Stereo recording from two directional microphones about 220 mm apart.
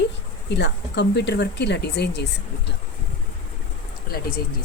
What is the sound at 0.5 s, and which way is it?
Speech, 50° left (ahead or behind).